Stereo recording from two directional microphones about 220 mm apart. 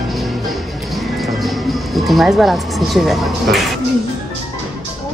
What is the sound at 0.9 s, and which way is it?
Speech, centre (ahead or behind).